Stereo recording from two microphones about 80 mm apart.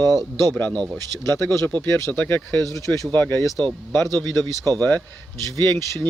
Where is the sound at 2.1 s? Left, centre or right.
Left.